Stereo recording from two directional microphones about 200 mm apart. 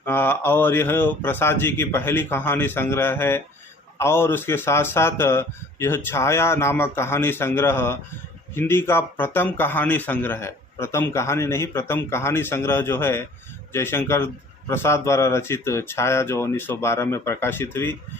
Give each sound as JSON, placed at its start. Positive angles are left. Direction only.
{"t": 0.0, "sound": "speech", "side_deg": 10}